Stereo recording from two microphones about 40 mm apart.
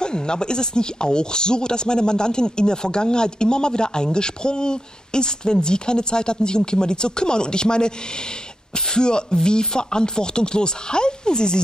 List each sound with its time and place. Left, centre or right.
0.0 s speech: left